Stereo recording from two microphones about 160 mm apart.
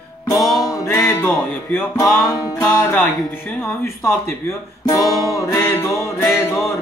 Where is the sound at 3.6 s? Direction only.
15° left (ahead or behind).